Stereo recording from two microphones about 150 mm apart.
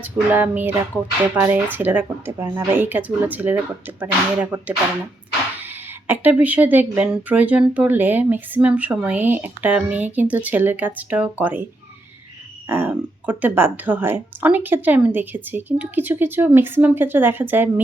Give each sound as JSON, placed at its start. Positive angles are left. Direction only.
{"t": 0.0, "sound": "speech", "side_deg": -10}
{"t": 12.6, "sound": "speech", "side_deg": -15}